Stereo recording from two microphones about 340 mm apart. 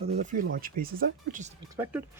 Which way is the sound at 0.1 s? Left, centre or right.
Right.